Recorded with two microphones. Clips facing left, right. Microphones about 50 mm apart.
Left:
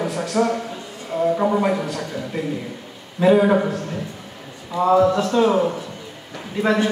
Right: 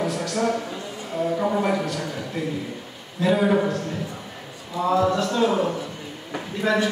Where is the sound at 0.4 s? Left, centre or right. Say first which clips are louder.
Left 4 dB; left.